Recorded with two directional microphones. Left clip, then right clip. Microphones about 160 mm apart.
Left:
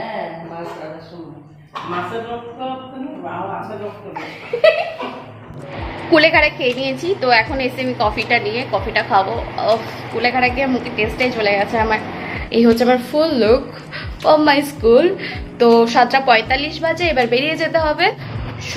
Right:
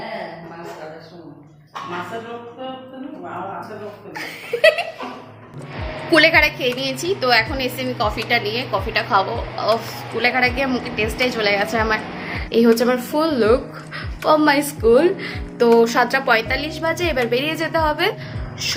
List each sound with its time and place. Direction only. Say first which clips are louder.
6.1 s a woman's voice: left 1 dB; 10° right (ahead or behind)